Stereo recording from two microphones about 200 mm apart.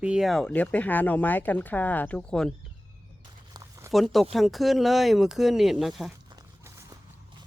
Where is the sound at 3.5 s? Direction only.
15° right (ahead or behind).